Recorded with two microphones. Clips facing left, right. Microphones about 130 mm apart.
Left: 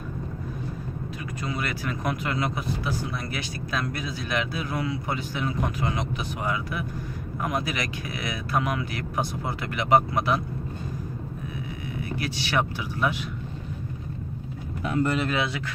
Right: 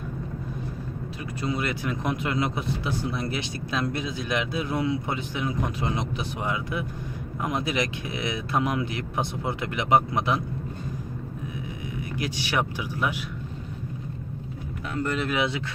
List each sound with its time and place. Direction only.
1.4 s speech: 25° right (ahead or behind)
12.0 s speech: 15° right (ahead or behind)
14.8 s speech: 5° left (ahead or behind)